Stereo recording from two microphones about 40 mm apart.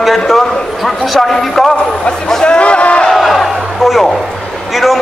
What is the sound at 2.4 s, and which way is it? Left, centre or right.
Speech, left.